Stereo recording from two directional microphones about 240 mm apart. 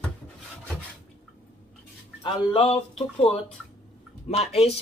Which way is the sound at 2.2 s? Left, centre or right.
Left.